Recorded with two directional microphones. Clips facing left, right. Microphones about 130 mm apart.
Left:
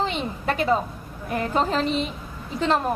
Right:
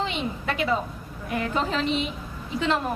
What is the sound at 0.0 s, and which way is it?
A woman's voice, 40° left (ahead or behind).